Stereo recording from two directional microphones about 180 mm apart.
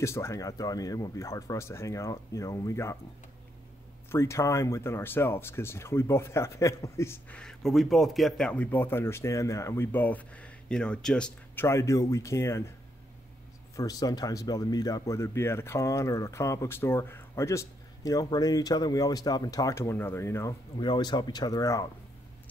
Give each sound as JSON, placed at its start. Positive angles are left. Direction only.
{"t": 0.0, "sound": "speech", "side_deg": 15}
{"t": 4.1, "sound": "speech", "side_deg": 15}
{"t": 13.7, "sound": "speech", "side_deg": 20}
{"t": 20.7, "sound": "speech", "side_deg": 25}